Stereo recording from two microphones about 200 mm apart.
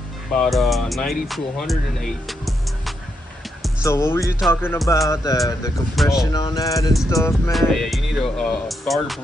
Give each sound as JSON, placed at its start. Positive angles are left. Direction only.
{"t": 0.3, "sound": "speech", "side_deg": 0}
{"t": 3.8, "sound": "speech", "side_deg": 15}
{"t": 6.0, "sound": "speech", "side_deg": 0}
{"t": 6.3, "sound": "speech", "side_deg": 20}
{"t": 7.5, "sound": "speech", "side_deg": 0}